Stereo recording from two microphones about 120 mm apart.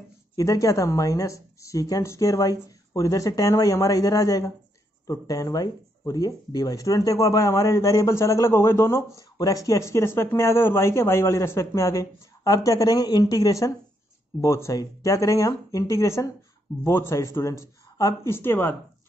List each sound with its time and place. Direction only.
0.4 s speech: 30° left (ahead or behind)